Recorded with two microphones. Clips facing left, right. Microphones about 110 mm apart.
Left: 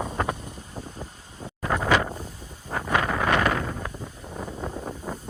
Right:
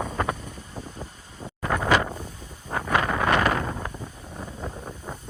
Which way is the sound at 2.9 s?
15° right (ahead or behind).